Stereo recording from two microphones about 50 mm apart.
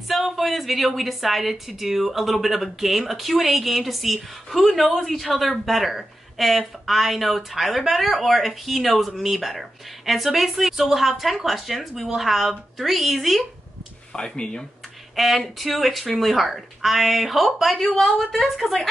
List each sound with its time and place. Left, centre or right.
0.1 s a woman's voice: centre
14.1 s speech: centre
15.1 s a woman's voice: centre